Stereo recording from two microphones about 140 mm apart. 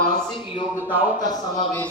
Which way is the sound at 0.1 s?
30° left (ahead or behind).